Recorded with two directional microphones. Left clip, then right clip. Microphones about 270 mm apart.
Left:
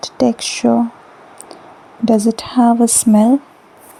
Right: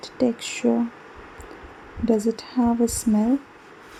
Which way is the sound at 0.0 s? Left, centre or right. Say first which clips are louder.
Left 8 dB; left.